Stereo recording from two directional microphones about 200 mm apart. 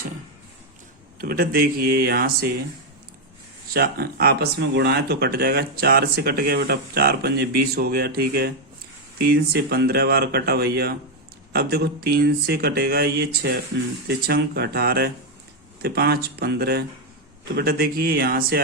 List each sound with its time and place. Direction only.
1.2 s speech: 50° right (ahead or behind)
3.7 s speech: 50° right (ahead or behind)